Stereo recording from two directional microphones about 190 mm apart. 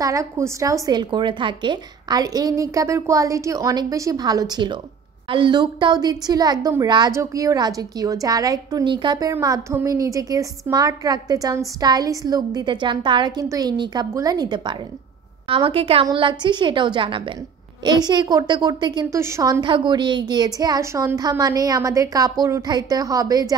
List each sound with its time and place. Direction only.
0.0 s a woman's voice: 15° right (ahead or behind)